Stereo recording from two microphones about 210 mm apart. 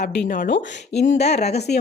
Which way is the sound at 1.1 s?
30° left (ahead or behind).